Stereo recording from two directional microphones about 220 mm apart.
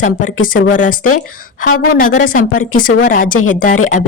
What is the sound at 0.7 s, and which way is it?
Speech, 35° left (ahead or behind).